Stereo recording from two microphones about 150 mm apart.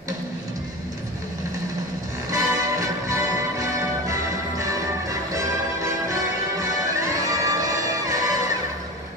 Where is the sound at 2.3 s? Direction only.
20° right (ahead or behind).